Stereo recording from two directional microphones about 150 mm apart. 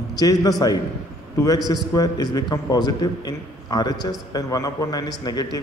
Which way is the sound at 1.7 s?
25° left (ahead or behind).